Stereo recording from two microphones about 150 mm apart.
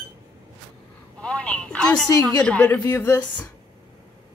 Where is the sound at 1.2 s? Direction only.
10° left (ahead or behind).